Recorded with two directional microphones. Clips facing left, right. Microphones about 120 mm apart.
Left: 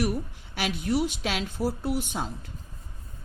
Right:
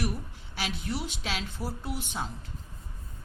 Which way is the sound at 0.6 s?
55° left (ahead or behind).